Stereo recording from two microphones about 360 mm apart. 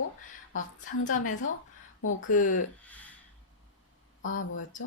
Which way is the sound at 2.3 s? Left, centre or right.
Left.